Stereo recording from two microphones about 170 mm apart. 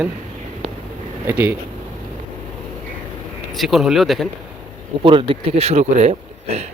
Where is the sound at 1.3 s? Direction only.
10° right (ahead or behind).